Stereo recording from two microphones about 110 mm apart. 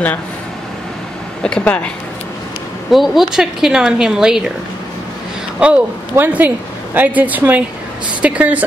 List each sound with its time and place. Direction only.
1.4 s speech: 10° left (ahead or behind)
2.9 s speech: centre (ahead or behind)
5.6 s a woman's voice: 15° right (ahead or behind)